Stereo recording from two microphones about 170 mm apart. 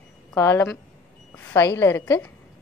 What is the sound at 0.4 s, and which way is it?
A woman's voice, 15° left (ahead or behind).